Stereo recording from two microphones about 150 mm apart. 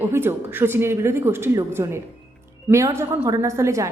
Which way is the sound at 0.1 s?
15° right (ahead or behind).